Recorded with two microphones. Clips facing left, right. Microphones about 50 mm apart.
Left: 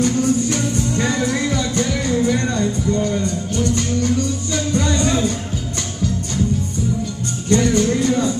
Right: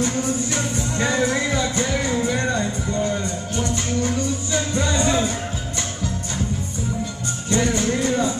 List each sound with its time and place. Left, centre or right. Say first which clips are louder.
0.0 s music: left 5 dB; right
7.5 s music: left 5 dB; right